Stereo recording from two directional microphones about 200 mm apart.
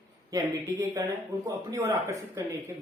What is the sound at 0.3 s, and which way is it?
Speech, 15° right (ahead or behind).